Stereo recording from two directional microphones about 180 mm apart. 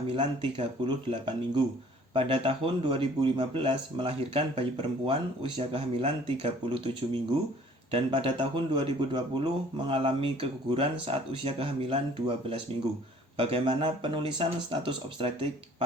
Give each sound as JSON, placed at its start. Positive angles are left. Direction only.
{"t": 0.1, "sound": "speech", "side_deg": -30}